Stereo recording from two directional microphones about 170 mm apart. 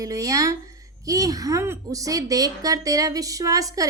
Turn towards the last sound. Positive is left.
turn(degrees=-20)  # may be behind; listen again after turning